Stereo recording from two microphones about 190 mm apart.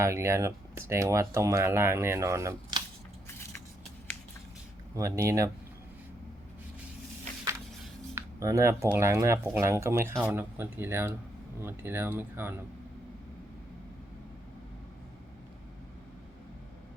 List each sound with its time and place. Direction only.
0.0 s speech: 15° right (ahead or behind)
3.2 s vehicle: 10° left (ahead or behind)
4.9 s speech: 15° right (ahead or behind)
8.1 s speech: 15° right (ahead or behind)